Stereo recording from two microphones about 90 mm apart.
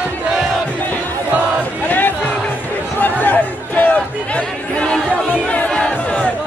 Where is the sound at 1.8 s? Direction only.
20° left (ahead or behind).